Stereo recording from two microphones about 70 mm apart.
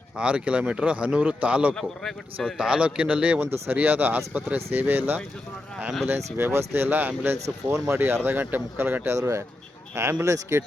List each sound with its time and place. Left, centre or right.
0.2 s a man's voice: centre
1.8 s speech: centre
2.6 s a man's voice: centre
3.4 s speech: right
7.3 s speech: right
9.0 s speech: right